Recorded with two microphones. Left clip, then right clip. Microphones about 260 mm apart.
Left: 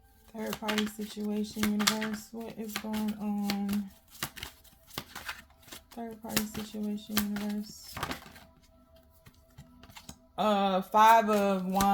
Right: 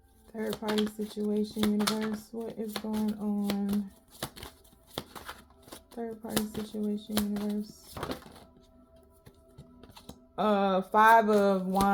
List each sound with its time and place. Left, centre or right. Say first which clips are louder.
0.3 s speech: right 2 dB; left
4.9 s shuffling cards: left 1 dB; left
6.2 s speech: left 2 dB; left
9.6 s speech: left 2 dB; left